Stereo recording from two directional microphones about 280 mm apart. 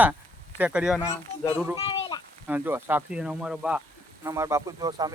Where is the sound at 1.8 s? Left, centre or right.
Centre.